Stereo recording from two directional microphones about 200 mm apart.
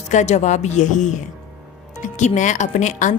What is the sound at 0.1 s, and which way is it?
Speech, 35° left (ahead or behind).